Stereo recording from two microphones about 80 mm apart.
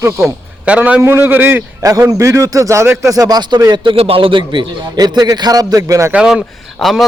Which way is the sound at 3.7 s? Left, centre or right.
Right.